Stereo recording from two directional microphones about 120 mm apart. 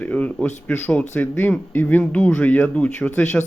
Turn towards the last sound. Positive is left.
turn(degrees=15)  # may be behind; listen again after turning